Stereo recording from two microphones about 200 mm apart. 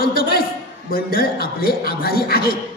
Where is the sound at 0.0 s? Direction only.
50° left (ahead or behind).